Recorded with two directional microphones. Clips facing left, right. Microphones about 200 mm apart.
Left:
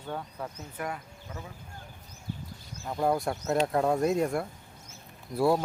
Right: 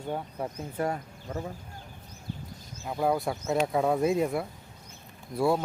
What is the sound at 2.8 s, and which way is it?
Speech, 5° right (ahead or behind).